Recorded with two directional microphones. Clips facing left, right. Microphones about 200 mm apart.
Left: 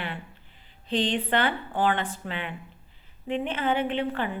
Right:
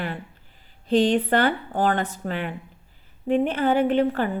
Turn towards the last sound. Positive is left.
turn(degrees=-40)  # may be behind; listen again after turning